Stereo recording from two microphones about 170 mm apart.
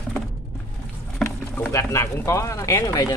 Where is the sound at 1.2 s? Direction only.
15° left (ahead or behind).